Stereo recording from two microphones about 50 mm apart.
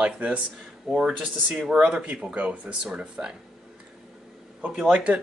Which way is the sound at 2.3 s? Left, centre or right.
Right.